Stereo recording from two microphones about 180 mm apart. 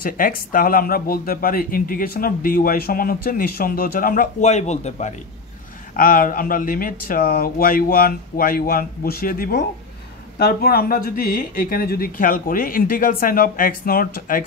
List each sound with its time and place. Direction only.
0.0 s speech: 50° left (ahead or behind)